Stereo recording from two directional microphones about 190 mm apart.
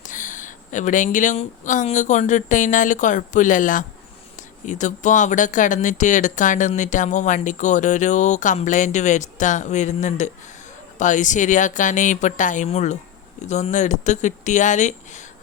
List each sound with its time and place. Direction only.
0.0 s speech: 40° left (ahead or behind)